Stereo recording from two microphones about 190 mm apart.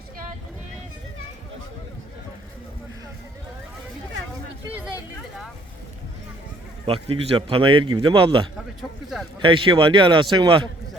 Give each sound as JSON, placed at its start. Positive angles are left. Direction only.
{"t": 6.8, "sound": "speech", "side_deg": -30}